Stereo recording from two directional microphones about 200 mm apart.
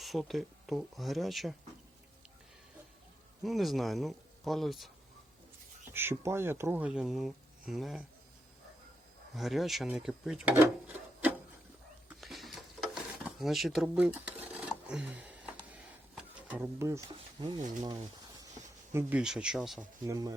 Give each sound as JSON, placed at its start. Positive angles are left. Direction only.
{"t": 0.0, "sound": "speech", "side_deg": 0}
{"t": 3.4, "sound": "speech", "side_deg": 0}
{"t": 5.9, "sound": "speech", "side_deg": -10}
{"t": 9.3, "sound": "speech", "side_deg": 0}
{"t": 12.0, "sound": "a sound", "side_deg": 0}
{"t": 18.9, "sound": "speech", "side_deg": -5}
{"t": 20.1, "sound": "speech", "side_deg": -15}